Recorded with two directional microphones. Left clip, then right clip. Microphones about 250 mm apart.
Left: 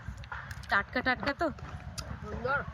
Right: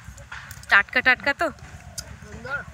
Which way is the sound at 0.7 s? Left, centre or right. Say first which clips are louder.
Right 11 dB; right.